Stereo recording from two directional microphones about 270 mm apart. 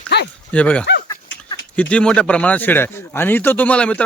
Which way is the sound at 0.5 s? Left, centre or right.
Centre.